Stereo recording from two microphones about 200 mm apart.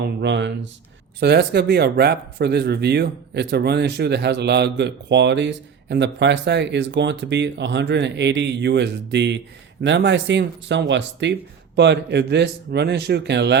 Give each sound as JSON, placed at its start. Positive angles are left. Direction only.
{"t": 0.0, "sound": "speech", "side_deg": -60}